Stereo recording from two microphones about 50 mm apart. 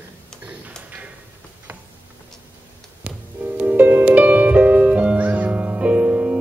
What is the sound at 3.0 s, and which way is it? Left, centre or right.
Music, right.